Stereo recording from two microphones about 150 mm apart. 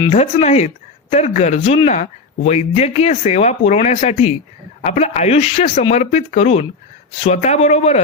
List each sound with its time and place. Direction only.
0.1 s speech: 45° left (ahead or behind)